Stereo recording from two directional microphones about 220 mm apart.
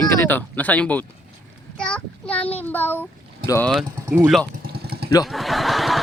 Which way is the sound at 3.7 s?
10° right (ahead or behind).